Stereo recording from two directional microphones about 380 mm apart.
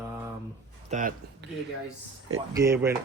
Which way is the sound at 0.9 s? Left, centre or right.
Right.